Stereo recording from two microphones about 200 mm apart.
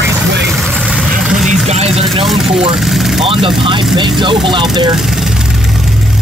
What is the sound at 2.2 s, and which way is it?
Speech, centre (ahead or behind).